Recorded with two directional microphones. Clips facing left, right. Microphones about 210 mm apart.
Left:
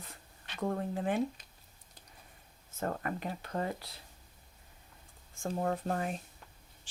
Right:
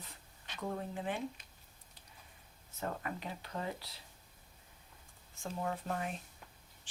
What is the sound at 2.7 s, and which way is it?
Speech, 50° left (ahead or behind).